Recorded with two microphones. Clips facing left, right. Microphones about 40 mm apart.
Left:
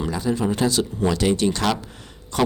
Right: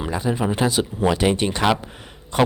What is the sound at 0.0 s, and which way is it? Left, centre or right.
Speech, right.